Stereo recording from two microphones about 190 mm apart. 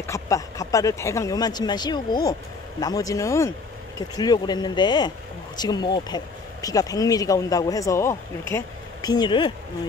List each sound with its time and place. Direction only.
0.0 s speech: 15° left (ahead or behind)